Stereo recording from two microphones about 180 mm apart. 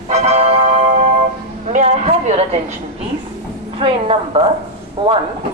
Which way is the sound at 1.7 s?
40° right (ahead or behind).